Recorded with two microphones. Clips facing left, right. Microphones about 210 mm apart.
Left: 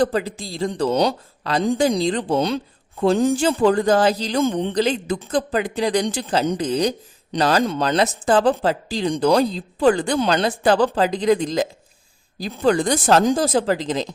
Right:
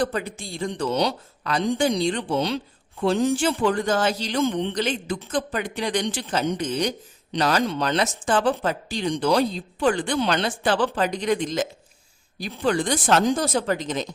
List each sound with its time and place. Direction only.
0.2 s a man's voice: 90° left
0.6 s speech: 40° left (ahead or behind)